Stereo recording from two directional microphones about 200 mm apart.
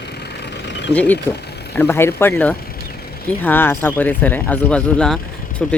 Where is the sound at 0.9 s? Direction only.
5° left (ahead or behind).